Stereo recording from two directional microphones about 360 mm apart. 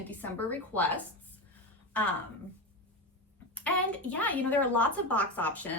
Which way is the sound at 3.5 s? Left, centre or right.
Centre.